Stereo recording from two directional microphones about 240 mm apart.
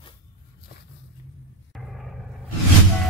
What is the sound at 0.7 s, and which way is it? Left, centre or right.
Walk, left.